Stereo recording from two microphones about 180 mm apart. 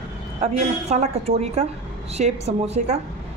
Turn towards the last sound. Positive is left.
turn(degrees=-35)  # may be behind; listen again after turning